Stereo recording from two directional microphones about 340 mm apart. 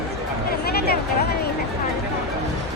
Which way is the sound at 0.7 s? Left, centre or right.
Left.